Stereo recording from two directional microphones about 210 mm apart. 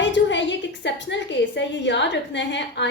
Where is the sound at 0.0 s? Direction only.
60° left (ahead or behind).